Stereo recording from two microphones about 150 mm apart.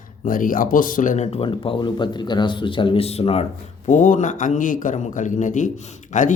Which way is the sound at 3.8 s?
60° left (ahead or behind).